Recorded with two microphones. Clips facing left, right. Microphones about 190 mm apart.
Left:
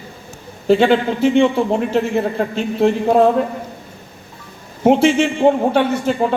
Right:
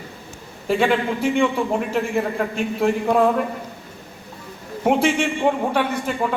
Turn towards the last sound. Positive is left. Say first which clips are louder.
# left 6 dB
turn(degrees=30)  # may be behind; listen again after turning